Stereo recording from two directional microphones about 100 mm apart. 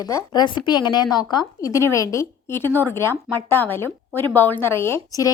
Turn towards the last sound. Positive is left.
turn(degrees=40)  # may be behind; listen again after turning